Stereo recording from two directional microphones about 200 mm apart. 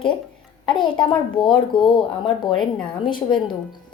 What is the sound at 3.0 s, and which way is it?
Speech, 25° left (ahead or behind).